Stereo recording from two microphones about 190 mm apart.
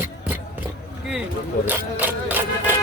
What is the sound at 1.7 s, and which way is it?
Music, 10° right (ahead or behind).